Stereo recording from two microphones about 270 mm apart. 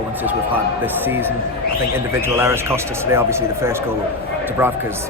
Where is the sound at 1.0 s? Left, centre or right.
Centre.